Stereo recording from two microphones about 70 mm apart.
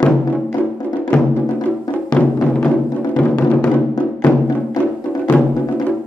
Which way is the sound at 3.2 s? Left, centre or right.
Centre.